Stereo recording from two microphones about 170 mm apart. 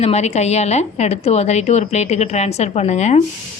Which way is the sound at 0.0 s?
40° left (ahead or behind).